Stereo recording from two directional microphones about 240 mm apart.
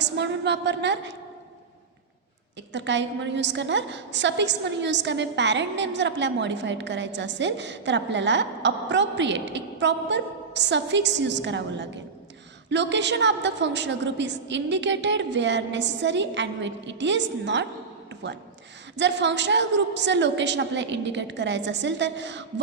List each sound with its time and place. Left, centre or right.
0.0 s a woman's voice: right
2.7 s a woman's voice: right